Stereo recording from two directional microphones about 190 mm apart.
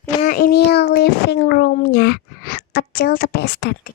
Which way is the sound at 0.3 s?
50° left (ahead or behind).